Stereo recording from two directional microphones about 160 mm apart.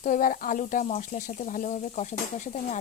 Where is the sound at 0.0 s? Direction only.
55° left (ahead or behind).